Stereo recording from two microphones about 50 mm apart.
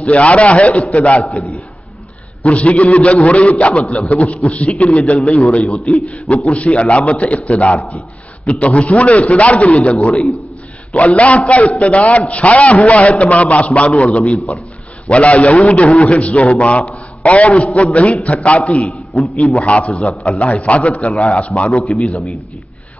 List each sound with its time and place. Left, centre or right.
0.0 s a man's voice: left
2.4 s a man's voice: left
21.8 s a man's voice: centre